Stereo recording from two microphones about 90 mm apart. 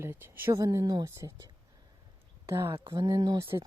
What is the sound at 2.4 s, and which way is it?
Speech, 35° right (ahead or behind).